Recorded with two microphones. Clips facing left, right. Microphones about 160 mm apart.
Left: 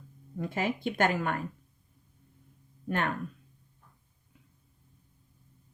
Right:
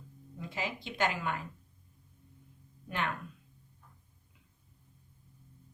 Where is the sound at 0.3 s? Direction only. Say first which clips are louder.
Left 7 dB; 50° left (ahead or behind).